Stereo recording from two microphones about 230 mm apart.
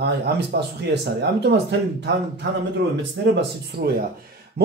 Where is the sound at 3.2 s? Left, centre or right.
Right.